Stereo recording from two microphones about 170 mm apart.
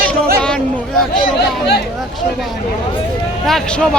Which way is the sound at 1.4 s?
75° left (ahead or behind).